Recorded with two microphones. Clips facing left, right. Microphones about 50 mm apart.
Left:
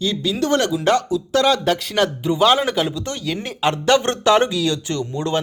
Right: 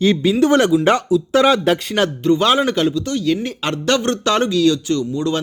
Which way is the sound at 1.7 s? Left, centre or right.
Centre.